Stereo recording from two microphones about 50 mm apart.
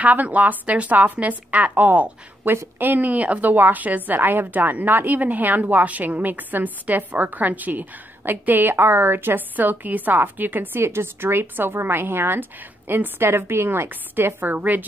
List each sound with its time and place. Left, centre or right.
0.0 s a woman's voice: right
13.8 s a woman's voice: right